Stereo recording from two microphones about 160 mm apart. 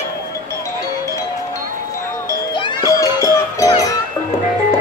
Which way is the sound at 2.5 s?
25° left (ahead or behind).